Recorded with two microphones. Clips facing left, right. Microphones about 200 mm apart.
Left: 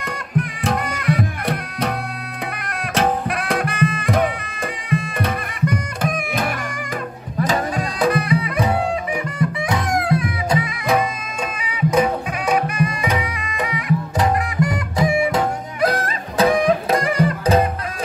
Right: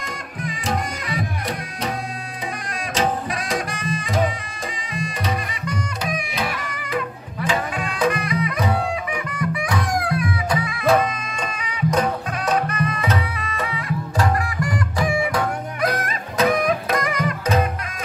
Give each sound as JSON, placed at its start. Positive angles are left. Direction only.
{"t": 0.0, "sound": "music", "side_deg": 60}